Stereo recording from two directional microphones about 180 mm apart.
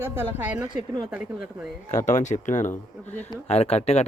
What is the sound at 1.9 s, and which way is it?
Speech, 40° left (ahead or behind).